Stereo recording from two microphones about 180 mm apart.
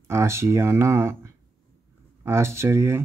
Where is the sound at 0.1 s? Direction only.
15° right (ahead or behind).